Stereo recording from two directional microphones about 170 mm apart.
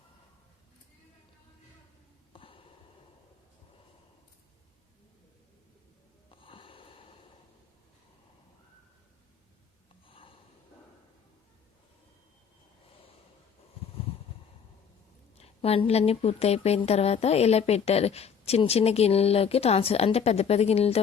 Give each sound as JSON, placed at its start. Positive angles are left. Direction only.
{"t": 2.3, "sound": "a sound", "side_deg": 30}
{"t": 6.4, "sound": "wheeze", "side_deg": 30}
{"t": 10.1, "sound": "snort", "side_deg": 30}
{"t": 15.4, "sound": "speech", "side_deg": 35}